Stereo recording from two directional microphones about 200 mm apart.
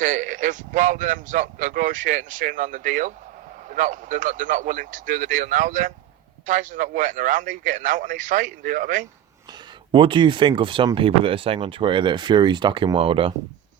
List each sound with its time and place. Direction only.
0.0 s speech: 40° right (ahead or behind)
9.5 s speech: 25° right (ahead or behind)